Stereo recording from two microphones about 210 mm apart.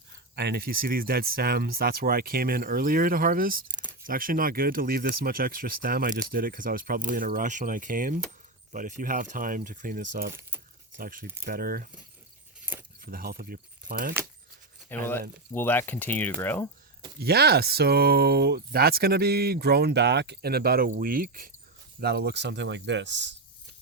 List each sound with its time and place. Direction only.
0.3 s speech: 50° right (ahead or behind)
13.0 s speech: 45° right (ahead or behind)
14.8 s speech: 10° left (ahead or behind)
17.2 s speech: 50° right (ahead or behind)